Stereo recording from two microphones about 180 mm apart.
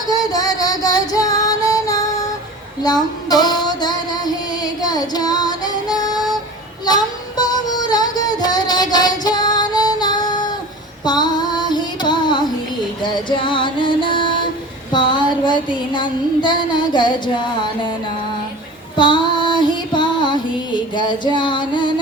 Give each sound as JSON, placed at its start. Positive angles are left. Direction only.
{"t": 0.1, "sound": "female singing", "side_deg": 20}
{"t": 6.8, "sound": "child singing", "side_deg": 20}
{"t": 11.0, "sound": "female singing", "side_deg": 25}
{"t": 13.0, "sound": "music", "side_deg": 25}
{"t": 14.9, "sound": "child singing", "side_deg": 25}
{"t": 18.9, "sound": "female singing", "side_deg": 25}
{"t": 21.3, "sound": "music", "side_deg": 25}